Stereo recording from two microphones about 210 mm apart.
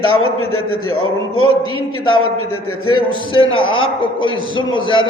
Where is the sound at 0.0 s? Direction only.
85° left.